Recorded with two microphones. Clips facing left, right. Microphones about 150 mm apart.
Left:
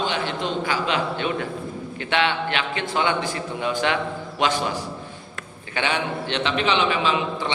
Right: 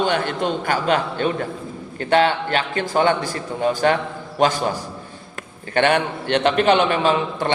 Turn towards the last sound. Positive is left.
turn(degrees=-50)  # may be behind; listen again after turning